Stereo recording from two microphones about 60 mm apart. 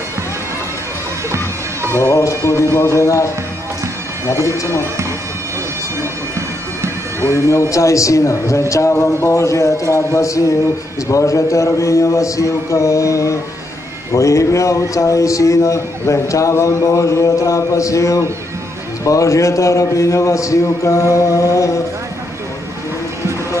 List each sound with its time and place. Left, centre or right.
1.3 s music: right
2.0 s a man's voice: left
7.2 s a man's voice: left
9.0 s a man's voice: left